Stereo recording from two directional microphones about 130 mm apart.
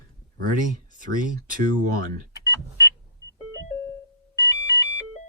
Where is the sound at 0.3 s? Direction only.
90° right.